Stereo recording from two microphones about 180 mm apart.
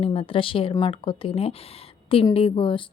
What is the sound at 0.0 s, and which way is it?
Speech, 30° left (ahead or behind).